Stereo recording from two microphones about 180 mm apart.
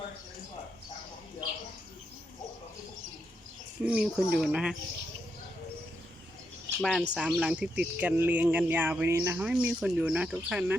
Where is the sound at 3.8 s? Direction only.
5° right (ahead or behind).